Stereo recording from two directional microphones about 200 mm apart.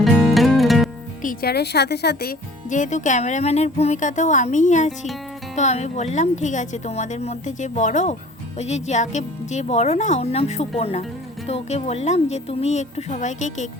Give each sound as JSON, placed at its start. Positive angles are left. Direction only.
{"t": 0.0, "sound": "music", "side_deg": 0}
{"t": 1.2, "sound": "speech", "side_deg": 45}
{"t": 2.6, "sound": "speech", "side_deg": 40}